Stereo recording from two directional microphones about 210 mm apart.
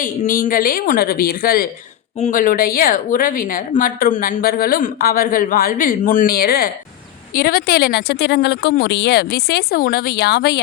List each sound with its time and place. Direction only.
0.0 s a woman's voice: 40° left (ahead or behind)